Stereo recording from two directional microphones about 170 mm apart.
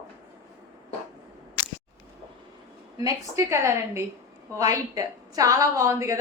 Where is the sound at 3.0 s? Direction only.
20° right (ahead or behind).